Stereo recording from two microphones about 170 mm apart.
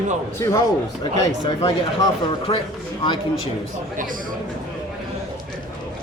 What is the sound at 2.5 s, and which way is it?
Speech, 30° left (ahead or behind).